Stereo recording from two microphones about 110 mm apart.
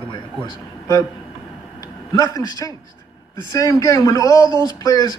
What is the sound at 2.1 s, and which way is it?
Speech, 35° left (ahead or behind).